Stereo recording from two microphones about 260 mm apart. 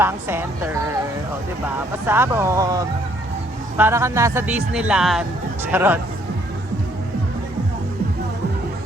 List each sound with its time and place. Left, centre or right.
0.0 s speech: centre